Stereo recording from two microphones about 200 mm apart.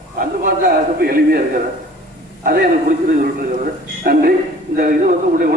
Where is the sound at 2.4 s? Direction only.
45° right (ahead or behind).